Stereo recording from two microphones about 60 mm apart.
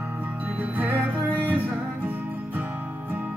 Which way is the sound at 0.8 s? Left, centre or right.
Right.